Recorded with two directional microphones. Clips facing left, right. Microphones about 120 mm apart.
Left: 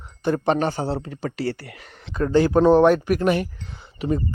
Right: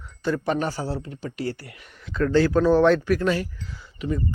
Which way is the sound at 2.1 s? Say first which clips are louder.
Left 1 dB; 20° left (ahead or behind).